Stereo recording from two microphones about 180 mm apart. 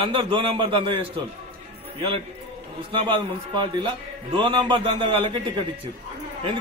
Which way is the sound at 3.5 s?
25° right (ahead or behind).